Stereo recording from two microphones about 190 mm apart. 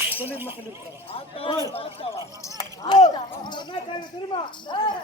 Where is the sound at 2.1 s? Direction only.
20° left (ahead or behind).